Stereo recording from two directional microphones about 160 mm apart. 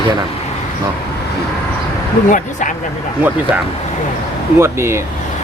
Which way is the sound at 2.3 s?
55° left (ahead or behind).